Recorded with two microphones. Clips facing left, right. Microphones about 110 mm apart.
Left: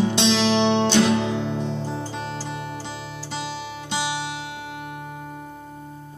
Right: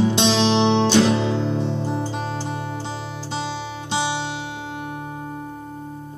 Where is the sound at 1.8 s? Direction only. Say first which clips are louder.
Right 5 dB; 15° right (ahead or behind).